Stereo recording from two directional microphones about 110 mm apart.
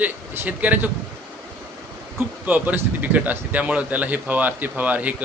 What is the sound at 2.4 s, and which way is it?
A man's voice, 15° right (ahead or behind).